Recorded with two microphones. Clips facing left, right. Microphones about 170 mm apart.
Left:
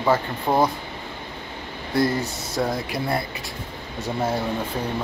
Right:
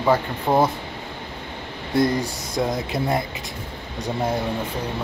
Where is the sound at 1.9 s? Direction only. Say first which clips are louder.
Right 2 dB; 20° right (ahead or behind).